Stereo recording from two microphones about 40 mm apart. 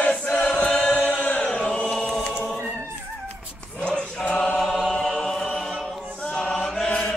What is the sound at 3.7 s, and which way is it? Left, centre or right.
Choir, left.